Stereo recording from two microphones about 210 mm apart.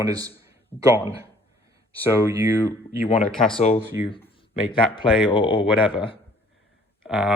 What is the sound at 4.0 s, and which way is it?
Speech, 15° right (ahead or behind).